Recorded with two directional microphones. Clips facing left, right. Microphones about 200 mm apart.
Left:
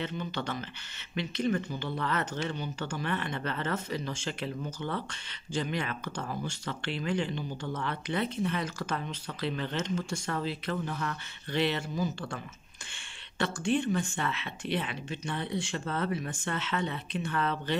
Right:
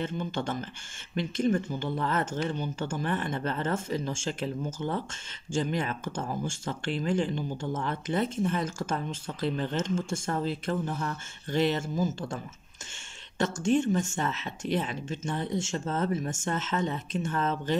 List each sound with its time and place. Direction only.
0.0 s speech: 50° right (ahead or behind)
13.4 s speech: 45° right (ahead or behind)